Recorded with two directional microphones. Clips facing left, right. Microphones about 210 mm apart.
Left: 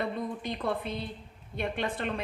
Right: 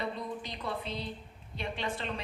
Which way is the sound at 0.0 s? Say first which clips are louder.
Left 4 dB; 55° left (ahead or behind).